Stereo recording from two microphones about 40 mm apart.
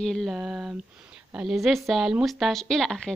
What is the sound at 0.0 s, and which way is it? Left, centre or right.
Speech, centre.